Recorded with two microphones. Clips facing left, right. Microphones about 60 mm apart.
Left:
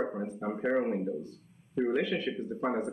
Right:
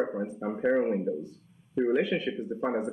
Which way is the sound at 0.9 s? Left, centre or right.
Centre.